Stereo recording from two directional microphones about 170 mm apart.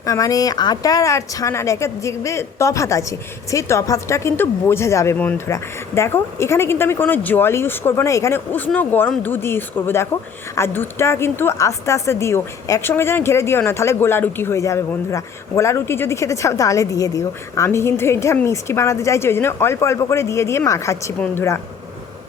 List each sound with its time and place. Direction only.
0.0 s a woman's voice: 20° left (ahead or behind)